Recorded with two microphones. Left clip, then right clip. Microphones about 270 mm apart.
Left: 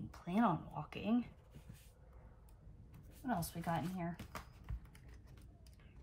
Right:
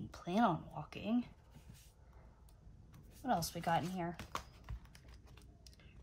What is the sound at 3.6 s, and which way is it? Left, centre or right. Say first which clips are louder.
Typing: right 5 dB; centre.